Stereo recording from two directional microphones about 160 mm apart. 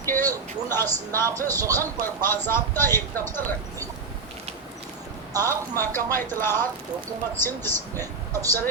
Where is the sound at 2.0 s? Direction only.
15° left (ahead or behind).